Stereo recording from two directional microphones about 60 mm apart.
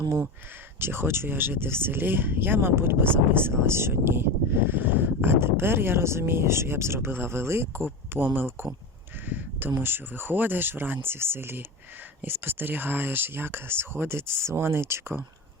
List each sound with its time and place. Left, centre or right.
0.8 s speech: right